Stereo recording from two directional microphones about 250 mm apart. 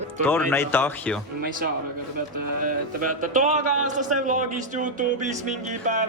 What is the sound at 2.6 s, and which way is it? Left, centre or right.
Speech, right.